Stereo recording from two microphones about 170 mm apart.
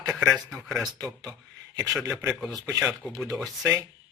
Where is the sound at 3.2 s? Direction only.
Centre (ahead or behind).